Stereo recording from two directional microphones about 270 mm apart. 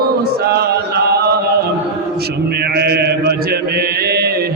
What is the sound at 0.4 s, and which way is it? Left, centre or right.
Chant, right.